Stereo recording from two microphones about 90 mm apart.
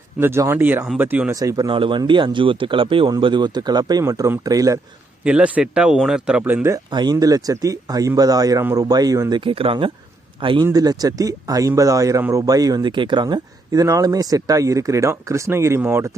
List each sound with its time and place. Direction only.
0.2 s speech: 30° right (ahead or behind)
1.3 s speech: 40° right (ahead or behind)
1.7 s speech: 70° right (ahead or behind)
3.2 s speech: 65° right (ahead or behind); by 4.8 s 40° right (ahead or behind)
5.2 s speech: 15° right (ahead or behind)
6.5 s speech: 30° right (ahead or behind)
6.9 s speech: 50° right (ahead or behind)
9.4 s speech: 85° right
10.4 s speech: 70° right (ahead or behind)
10.7 s speech: 45° right (ahead or behind)
12.9 s speech: 60° right (ahead or behind)
13.2 s speech: 45° right (ahead or behind); by 16.1 s 25° right (ahead or behind)